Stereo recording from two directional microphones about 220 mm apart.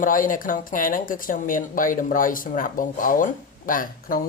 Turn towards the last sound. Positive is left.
turn(degrees=40)  # may be behind; listen again after turning